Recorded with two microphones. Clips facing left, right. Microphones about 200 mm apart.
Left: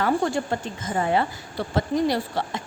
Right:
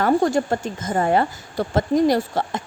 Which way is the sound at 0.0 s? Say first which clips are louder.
Right 5 dB; 45° right (ahead or behind).